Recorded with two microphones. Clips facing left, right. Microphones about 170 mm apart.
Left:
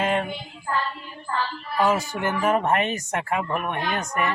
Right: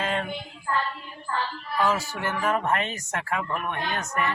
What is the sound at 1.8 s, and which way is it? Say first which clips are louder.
Speech: left 4 dB; 15° left (ahead or behind).